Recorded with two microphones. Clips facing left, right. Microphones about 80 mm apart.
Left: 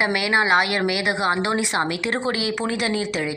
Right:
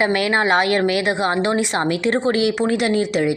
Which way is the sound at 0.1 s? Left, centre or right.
Right.